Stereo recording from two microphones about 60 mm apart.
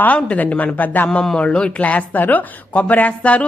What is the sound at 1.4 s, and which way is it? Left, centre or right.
A woman's voice, centre.